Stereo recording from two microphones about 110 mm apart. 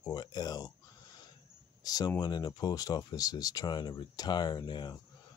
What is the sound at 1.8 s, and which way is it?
Speech, 35° left (ahead or behind).